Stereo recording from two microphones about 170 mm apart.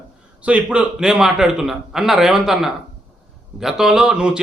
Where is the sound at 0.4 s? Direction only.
5° right (ahead or behind).